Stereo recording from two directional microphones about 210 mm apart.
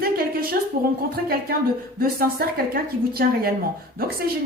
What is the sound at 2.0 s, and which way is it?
A woman's voice, 45° right (ahead or behind).